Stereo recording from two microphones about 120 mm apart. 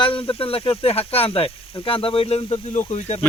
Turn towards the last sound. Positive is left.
turn(degrees=60)  # may be behind; listen again after turning